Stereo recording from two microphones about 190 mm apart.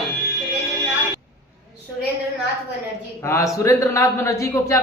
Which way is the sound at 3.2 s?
15° left (ahead or behind).